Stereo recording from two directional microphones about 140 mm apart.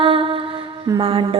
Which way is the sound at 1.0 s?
40° right (ahead or behind).